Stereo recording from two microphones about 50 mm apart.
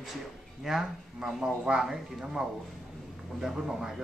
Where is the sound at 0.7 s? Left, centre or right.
Centre.